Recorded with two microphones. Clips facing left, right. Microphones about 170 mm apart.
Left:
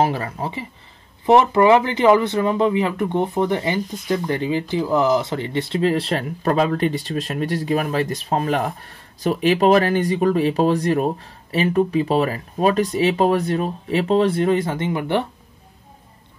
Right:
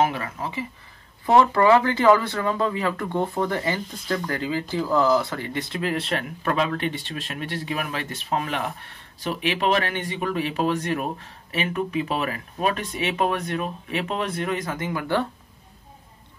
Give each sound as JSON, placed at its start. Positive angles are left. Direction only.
{"t": 0.0, "sound": "speech", "side_deg": 35}
{"t": 1.2, "sound": "speech", "side_deg": 20}